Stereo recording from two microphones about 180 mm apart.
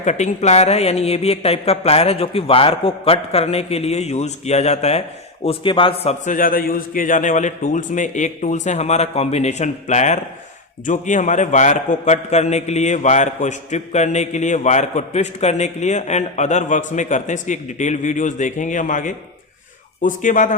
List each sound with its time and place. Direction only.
0.0 s a man's voice: 40° left (ahead or behind)